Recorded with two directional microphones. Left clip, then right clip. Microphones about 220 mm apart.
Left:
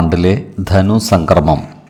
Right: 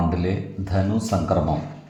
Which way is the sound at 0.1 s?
40° left (ahead or behind).